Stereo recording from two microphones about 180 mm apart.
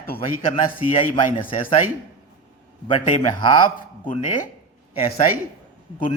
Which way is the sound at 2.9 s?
30° left (ahead or behind).